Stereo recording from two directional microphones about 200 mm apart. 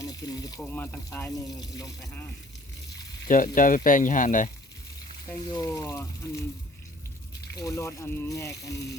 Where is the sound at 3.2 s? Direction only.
40° left (ahead or behind).